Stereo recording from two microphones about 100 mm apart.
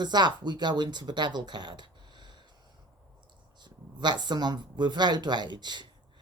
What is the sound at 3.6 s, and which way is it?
Speech, 45° right (ahead or behind).